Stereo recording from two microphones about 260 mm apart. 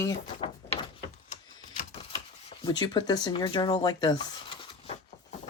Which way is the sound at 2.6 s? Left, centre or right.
Centre.